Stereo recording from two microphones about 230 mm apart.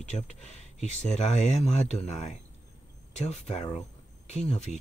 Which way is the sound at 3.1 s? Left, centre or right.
Left.